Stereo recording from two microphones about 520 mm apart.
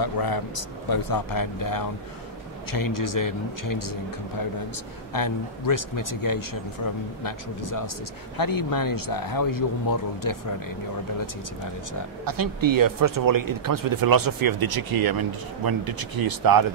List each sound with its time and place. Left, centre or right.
0.0 s speech: left
5.1 s speech: left
12.3 s speech: right